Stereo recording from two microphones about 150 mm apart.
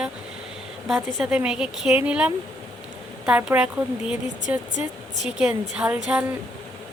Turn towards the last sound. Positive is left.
turn(degrees=-5)  # may be behind; listen again after turning